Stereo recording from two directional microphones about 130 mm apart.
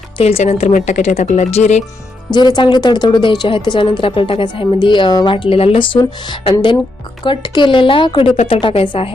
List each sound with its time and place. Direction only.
0.2 s a woman's voice: 50° left (ahead or behind)
0.7 s speech: 75° left (ahead or behind); by 1.8 s 55° left (ahead or behind)
2.3 s a woman's voice: 35° left (ahead or behind)
8.4 s speech: 55° left (ahead or behind)
8.6 s a woman's voice: 40° left (ahead or behind)